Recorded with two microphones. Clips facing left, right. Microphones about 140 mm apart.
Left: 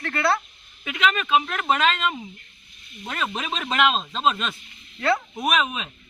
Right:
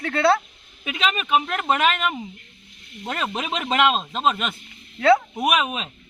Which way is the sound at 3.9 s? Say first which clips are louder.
Right 1 dB; 15° right (ahead or behind).